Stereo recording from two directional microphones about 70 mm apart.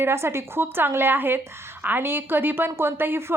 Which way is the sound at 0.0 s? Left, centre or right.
Right.